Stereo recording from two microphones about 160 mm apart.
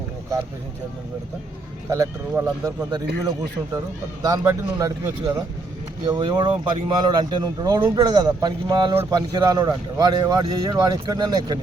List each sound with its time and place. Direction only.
1.9 s speech: 20° right (ahead or behind)